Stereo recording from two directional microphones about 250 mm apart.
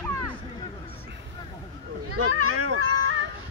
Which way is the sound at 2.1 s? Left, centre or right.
Right.